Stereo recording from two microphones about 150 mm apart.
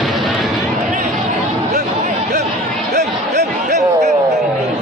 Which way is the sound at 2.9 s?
50° right (ahead or behind).